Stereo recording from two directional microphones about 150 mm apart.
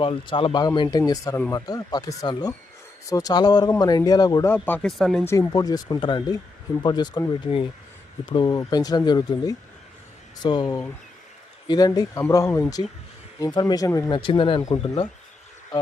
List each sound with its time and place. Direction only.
0.0 s speech: 35° left (ahead or behind)
4.5 s speech: 10° left (ahead or behind)
5.2 s speech: 15° left (ahead or behind)
5.5 s speech: 25° left (ahead or behind)
14.1 s speech: 35° left (ahead or behind)
14.6 s speech: 20° left (ahead or behind)